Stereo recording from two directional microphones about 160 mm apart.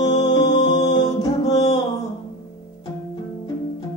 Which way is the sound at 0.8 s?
25° left (ahead or behind).